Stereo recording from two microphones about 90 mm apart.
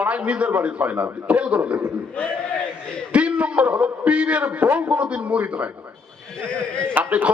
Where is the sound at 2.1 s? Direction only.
10° left (ahead or behind).